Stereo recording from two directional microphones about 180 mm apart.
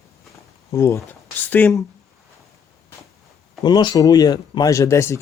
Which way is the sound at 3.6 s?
25° left (ahead or behind).